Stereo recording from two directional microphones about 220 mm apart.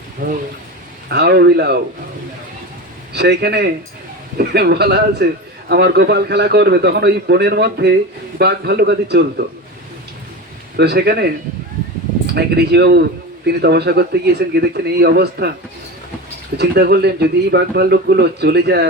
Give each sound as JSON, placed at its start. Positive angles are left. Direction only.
{"t": 0.2, "sound": "a man's voice", "side_deg": -40}
{"t": 3.1, "sound": "a man's voice", "side_deg": -50}
{"t": 10.8, "sound": "a man's voice", "side_deg": -50}
{"t": 16.6, "sound": "a man's voice", "side_deg": -45}